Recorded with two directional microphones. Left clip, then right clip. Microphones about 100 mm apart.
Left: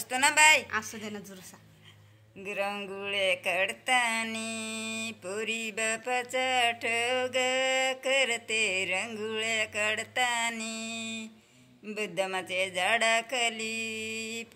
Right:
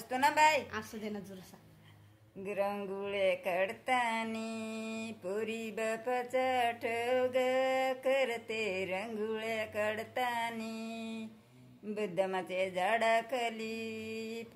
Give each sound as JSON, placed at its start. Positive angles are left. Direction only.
{"t": 0.1, "sound": "speech", "side_deg": -25}
{"t": 0.7, "sound": "a woman's voice", "side_deg": 25}
{"t": 2.4, "sound": "speech", "side_deg": -30}